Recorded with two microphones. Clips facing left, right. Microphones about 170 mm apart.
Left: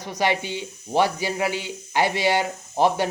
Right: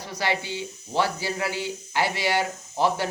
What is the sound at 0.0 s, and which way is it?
Speech, 20° left (ahead or behind).